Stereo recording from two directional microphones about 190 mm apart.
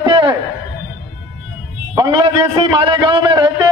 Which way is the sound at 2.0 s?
25° right (ahead or behind).